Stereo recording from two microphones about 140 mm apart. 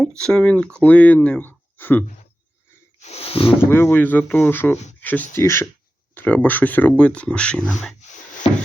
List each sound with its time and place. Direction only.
0.2 s speech: 5° left (ahead or behind)
3.0 s a sound: 45° left (ahead or behind)
3.6 s speech: 15° left (ahead or behind)